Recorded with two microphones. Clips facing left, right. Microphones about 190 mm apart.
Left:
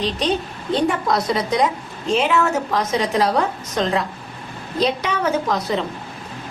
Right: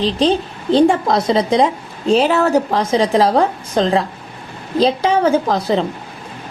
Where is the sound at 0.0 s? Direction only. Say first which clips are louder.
Right 6 dB; 30° right (ahead or behind).